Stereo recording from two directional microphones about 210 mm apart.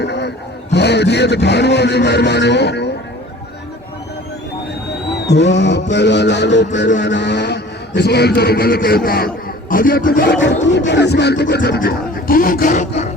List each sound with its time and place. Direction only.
0.0 s a man's voice: 55° left (ahead or behind)
5.1 s a man's voice: 55° left (ahead or behind); by 12.9 s 35° left (ahead or behind)